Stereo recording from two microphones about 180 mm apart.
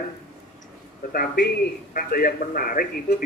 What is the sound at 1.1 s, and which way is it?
A man's voice, 55° left (ahead or behind).